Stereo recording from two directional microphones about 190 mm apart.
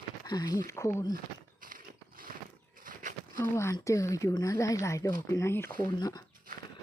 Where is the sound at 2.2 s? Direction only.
50° right (ahead or behind).